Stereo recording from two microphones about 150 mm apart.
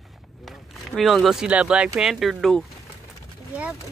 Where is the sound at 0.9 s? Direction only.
Centre (ahead or behind).